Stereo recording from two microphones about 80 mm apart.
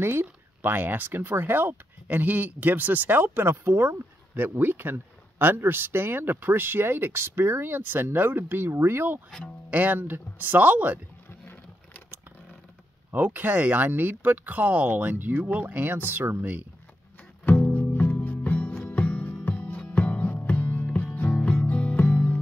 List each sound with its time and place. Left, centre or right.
0.0 s speech: right
11.2 s a sound: left
13.1 s speech: right
17.5 s music: left